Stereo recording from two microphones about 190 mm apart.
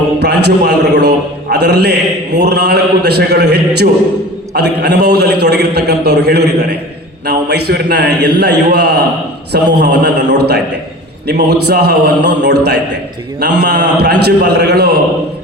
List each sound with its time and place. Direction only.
0.2 s a man's voice: 60° right (ahead or behind)